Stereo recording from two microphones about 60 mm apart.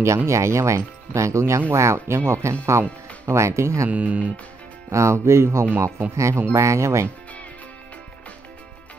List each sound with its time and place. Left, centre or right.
0.3 s speech: right
3.9 s speech: right
4.9 s speech: right